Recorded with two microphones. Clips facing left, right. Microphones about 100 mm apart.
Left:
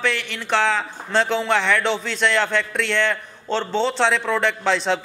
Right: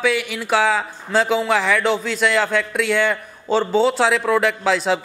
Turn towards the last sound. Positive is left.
turn(degrees=-5)  # may be behind; listen again after turning